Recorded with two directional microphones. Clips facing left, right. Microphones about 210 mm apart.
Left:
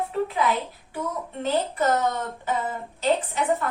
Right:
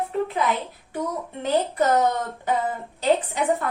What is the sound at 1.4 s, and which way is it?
A woman's voice, 15° right (ahead or behind).